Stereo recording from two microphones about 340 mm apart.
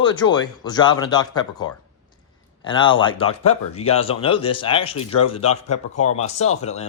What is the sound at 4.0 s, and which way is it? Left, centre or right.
Speech, centre.